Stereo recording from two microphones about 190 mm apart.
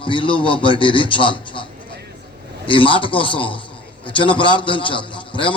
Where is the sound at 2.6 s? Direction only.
25° left (ahead or behind).